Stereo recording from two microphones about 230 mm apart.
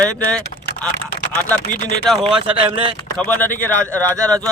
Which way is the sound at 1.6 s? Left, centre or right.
Left.